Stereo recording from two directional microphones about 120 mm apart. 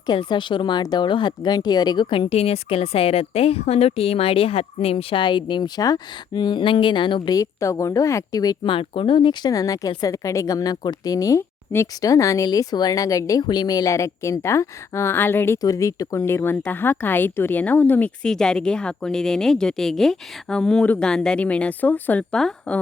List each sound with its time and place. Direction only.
0.1 s speech: 40° left (ahead or behind)
8.7 s a woman's voice: 45° left (ahead or behind); by 22.8 s 5° left (ahead or behind)